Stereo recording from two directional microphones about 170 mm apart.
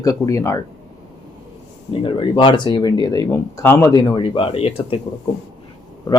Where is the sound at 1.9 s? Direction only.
30° left (ahead or behind).